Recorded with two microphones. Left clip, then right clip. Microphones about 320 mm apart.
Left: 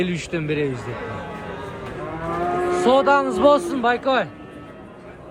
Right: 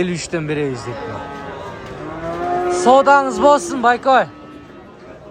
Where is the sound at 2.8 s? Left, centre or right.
Centre.